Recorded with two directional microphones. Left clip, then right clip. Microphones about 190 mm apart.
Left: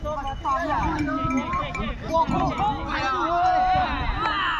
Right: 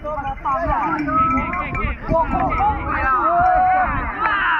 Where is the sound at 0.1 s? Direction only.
30° right (ahead or behind).